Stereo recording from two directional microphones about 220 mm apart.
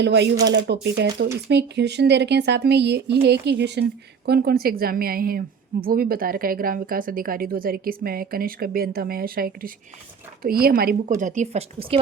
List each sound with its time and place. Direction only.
0.0 s speech: 50° right (ahead or behind); by 11.9 s 25° right (ahead or behind)